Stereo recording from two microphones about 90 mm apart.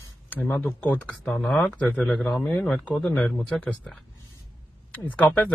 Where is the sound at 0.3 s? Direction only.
15° left (ahead or behind).